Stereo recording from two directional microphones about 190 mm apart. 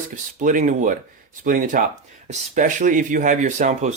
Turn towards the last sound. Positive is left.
turn(degrees=-40)  # may be behind; listen again after turning